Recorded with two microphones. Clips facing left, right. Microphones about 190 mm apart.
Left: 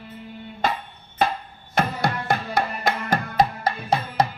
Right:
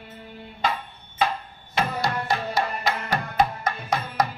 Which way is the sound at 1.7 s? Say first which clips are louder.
Left 2 dB; 55° left (ahead or behind).